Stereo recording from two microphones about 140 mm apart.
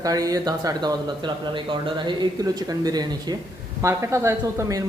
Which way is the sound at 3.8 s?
20° right (ahead or behind).